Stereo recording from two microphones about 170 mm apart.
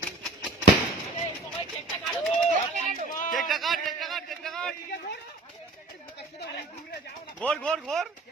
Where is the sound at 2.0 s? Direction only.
Centre (ahead or behind).